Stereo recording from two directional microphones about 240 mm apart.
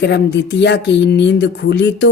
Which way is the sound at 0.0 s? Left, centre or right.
Left.